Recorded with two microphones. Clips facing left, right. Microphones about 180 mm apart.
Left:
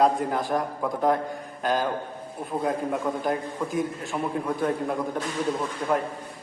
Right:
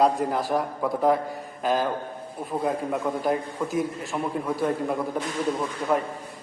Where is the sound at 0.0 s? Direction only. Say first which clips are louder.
Even; centre (ahead or behind).